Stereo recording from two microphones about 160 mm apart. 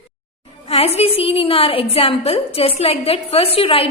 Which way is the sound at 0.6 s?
40° left (ahead or behind).